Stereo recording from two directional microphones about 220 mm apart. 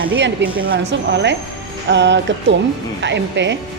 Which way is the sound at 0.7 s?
50° right (ahead or behind).